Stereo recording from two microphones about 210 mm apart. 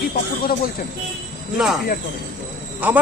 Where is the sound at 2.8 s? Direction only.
5° right (ahead or behind).